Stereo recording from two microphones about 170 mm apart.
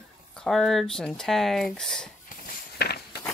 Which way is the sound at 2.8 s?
70° left (ahead or behind).